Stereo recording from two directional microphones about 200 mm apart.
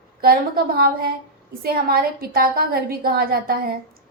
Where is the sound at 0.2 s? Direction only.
50° right (ahead or behind).